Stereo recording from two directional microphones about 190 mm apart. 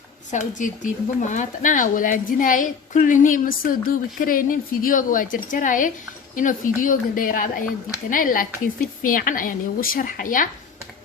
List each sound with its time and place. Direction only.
0.3 s a woman's voice: 40° left (ahead or behind)